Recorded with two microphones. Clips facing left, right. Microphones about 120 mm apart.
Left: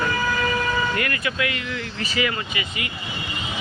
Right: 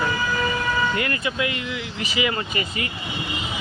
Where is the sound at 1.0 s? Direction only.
25° right (ahead or behind).